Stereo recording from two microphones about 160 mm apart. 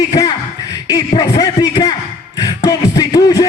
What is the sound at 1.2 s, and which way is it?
Speech, 20° left (ahead or behind).